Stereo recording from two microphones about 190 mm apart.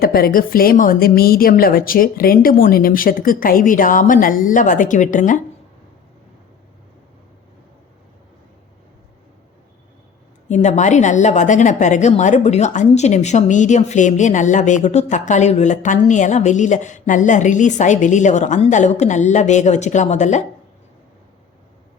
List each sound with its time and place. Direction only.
0.0 s a woman's voice: 50° left (ahead or behind)
10.5 s a woman's voice: 40° left (ahead or behind)